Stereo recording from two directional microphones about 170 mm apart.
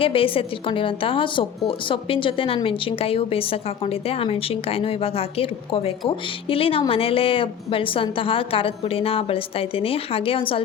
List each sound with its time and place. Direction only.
0.0 s a woman's voice: 30° left (ahead or behind)